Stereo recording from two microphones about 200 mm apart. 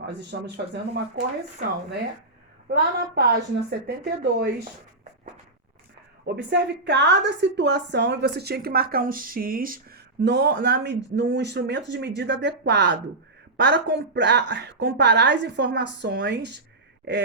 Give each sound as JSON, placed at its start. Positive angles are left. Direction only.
{"t": 0.0, "sound": "a woman's voice", "side_deg": -60}
{"t": 2.6, "sound": "a woman's voice", "side_deg": -55}
{"t": 6.2, "sound": "a woman's voice", "side_deg": -60}